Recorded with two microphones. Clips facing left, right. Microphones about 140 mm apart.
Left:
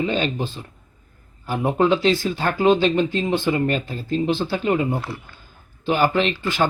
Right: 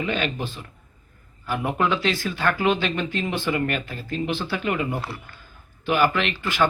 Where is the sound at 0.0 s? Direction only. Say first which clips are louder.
Left 4 dB; 30° left (ahead or behind).